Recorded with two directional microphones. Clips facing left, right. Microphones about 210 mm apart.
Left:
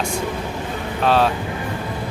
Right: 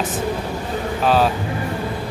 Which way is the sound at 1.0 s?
Centre (ahead or behind).